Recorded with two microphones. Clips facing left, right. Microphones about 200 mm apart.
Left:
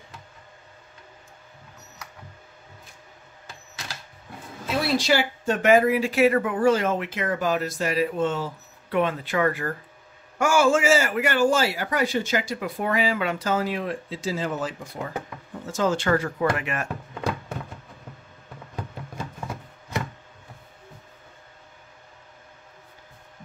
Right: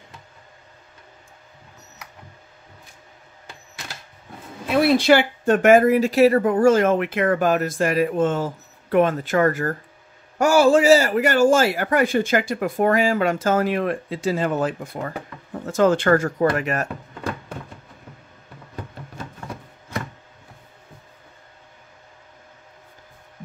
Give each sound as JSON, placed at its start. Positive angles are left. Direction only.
{"t": 4.6, "sound": "a man's voice", "side_deg": -60}